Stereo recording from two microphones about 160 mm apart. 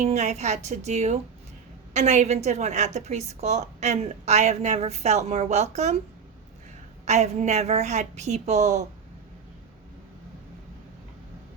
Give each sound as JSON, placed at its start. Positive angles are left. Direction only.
{"t": 0.0, "sound": "a woman's voice", "side_deg": -45}
{"t": 7.0, "sound": "a woman's voice", "side_deg": -45}